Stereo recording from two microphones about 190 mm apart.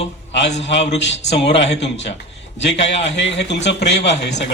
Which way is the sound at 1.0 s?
70° left (ahead or behind).